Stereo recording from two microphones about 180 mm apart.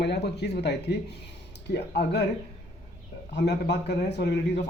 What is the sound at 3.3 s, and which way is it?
Speech, 70° left (ahead or behind).